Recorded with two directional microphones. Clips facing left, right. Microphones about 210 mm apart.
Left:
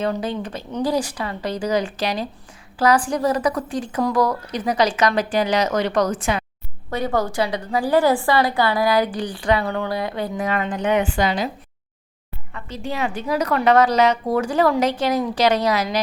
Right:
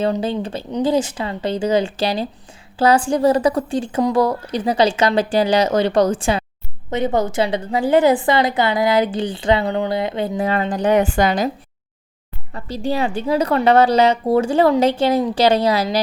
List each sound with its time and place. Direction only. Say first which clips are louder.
0.0 s a woman's voice: right 4 dB; 30° right (ahead or behind); by 11.5 s 45° right (ahead or behind)
12.5 s a woman's voice: right 6 dB; 35° right (ahead or behind)